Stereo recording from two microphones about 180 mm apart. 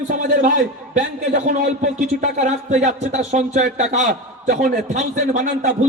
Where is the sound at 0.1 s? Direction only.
45° right (ahead or behind).